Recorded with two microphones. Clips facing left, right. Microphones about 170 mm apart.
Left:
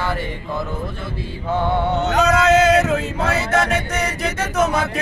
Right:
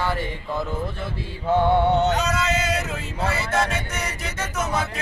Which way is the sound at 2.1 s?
70° left (ahead or behind).